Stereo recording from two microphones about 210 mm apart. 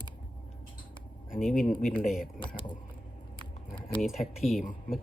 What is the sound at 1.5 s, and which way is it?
Speech, centre (ahead or behind).